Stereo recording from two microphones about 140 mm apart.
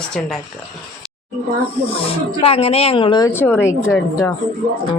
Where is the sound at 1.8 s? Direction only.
45° left (ahead or behind).